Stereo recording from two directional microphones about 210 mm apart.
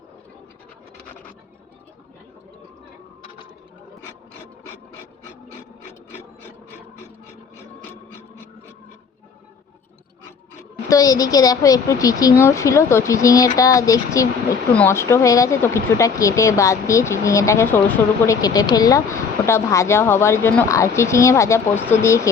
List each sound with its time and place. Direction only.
10.8 s speech: 15° left (ahead or behind)